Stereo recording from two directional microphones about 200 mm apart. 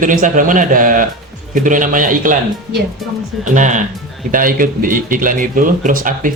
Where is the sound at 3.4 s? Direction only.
40° right (ahead or behind).